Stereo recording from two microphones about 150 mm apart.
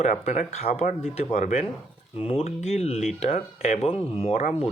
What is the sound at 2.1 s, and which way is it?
Speech, 40° left (ahead or behind).